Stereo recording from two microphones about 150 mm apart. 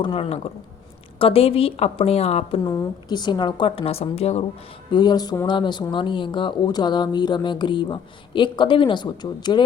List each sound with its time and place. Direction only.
0.0 s speech: 40° left (ahead or behind)
2.6 s speech: 25° left (ahead or behind); by 4.4 s 45° left (ahead or behind)
4.9 s speech: 30° left (ahead or behind)